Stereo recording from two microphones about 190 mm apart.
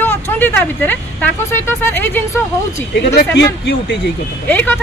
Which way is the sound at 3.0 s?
60° left (ahead or behind).